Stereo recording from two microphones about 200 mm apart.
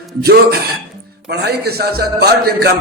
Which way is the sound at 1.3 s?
55° right (ahead or behind).